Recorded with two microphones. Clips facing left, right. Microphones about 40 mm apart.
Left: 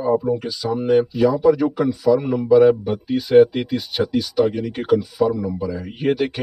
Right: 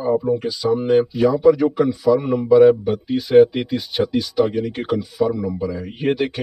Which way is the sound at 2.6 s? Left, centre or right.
Centre.